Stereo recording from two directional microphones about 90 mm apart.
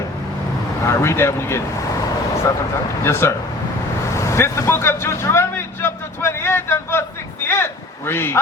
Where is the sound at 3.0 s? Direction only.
30° left (ahead or behind).